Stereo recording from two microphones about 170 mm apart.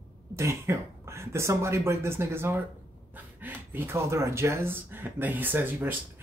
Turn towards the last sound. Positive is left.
turn(degrees=-10)  # may be behind; listen again after turning